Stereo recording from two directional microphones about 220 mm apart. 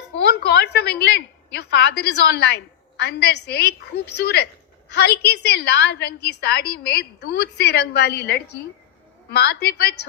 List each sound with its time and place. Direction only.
0.2 s a woman's voice: 45° left (ahead or behind)